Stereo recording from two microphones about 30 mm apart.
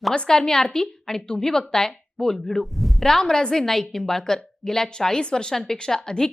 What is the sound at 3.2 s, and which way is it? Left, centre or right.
Speech, left.